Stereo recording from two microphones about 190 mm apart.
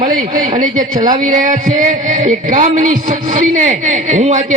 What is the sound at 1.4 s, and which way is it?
Speech, 45° right (ahead or behind).